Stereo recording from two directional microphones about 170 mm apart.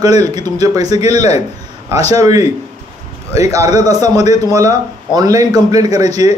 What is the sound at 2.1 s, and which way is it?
Speech, 20° right (ahead or behind).